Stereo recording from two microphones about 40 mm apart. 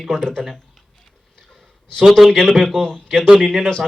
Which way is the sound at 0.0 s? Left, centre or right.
Centre.